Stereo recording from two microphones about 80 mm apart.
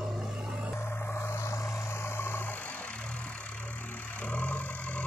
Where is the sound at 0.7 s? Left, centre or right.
Left.